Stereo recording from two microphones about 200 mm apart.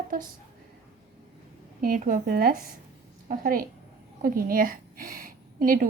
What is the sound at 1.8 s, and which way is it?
A woman's voice, 45° right (ahead or behind).